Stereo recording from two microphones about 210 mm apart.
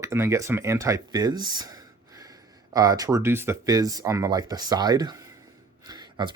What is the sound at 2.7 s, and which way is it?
Speech, 15° right (ahead or behind).